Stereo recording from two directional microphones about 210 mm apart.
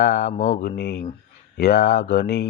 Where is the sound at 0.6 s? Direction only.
50° left (ahead or behind).